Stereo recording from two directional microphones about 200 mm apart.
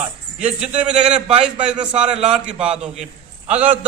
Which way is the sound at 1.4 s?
5° right (ahead or behind).